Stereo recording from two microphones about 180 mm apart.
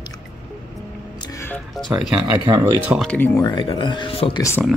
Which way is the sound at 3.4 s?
25° left (ahead or behind).